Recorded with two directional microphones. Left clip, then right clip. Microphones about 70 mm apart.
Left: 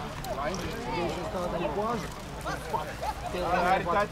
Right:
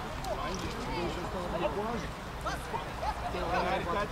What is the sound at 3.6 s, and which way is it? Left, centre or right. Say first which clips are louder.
Speech: left 6 dB; left.